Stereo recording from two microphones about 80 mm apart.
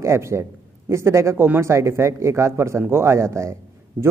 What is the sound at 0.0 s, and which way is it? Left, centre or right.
Speech, right.